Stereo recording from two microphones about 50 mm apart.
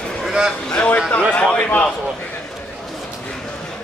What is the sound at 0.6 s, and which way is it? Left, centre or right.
A man's voice, left.